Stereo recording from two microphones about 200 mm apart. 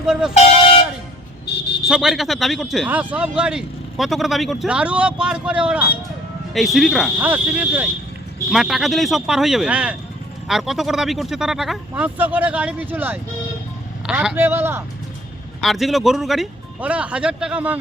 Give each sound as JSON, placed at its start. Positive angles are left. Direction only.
{"t": 0.0, "sound": "speech", "side_deg": -5}
{"t": 1.5, "sound": "a sound", "side_deg": 55}
{"t": 1.9, "sound": "speech", "side_deg": 0}
{"t": 15.6, "sound": "speech", "side_deg": 0}